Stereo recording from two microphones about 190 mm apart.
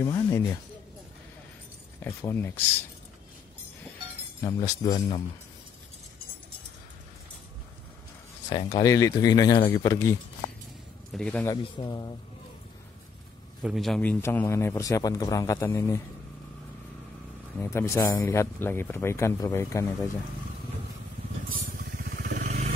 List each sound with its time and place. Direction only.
0.0 s a man's voice: 15° left (ahead or behind)
2.0 s a man's voice: 10° left (ahead or behind)
4.4 s speech: 20° left (ahead or behind)
8.5 s speech: 20° left (ahead or behind)
11.1 s a man's voice: 5° left (ahead or behind)
11.4 s speech: 20° left (ahead or behind)
13.6 s a man's voice: centre (ahead or behind); by 16.0 s 15° left (ahead or behind)
17.6 s a man's voice: 15° left (ahead or behind)
22.2 s vehicle: 40° right (ahead or behind)